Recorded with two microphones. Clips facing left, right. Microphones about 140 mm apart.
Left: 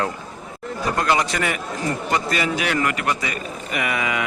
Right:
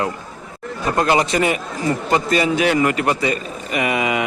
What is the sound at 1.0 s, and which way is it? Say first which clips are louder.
A man's voice: right 5 dB; 25° right (ahead or behind).